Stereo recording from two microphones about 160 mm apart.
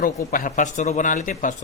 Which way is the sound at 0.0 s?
60° left (ahead or behind).